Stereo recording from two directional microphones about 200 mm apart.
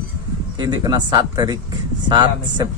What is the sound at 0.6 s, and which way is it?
Speech, 20° right (ahead or behind).